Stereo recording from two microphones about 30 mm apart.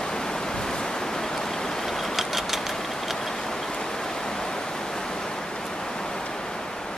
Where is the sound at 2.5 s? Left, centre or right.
Centre.